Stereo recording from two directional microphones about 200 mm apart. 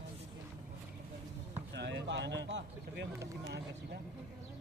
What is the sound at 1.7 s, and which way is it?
Speech, 60° right (ahead or behind).